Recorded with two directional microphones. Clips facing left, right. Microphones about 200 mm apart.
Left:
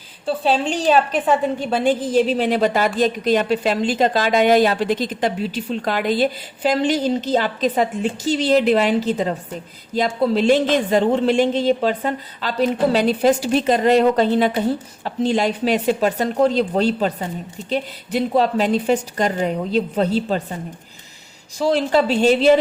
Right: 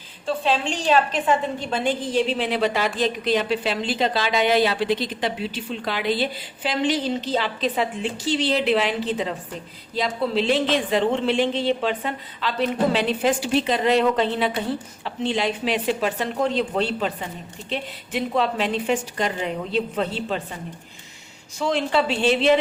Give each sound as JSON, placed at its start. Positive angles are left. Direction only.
{"t": 0.4, "sound": "a woman's voice", "side_deg": 40}
{"t": 21.6, "sound": "speech", "side_deg": 35}